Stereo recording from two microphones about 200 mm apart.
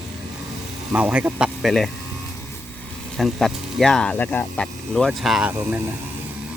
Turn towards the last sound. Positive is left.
turn(degrees=-5)  # may be behind; listen again after turning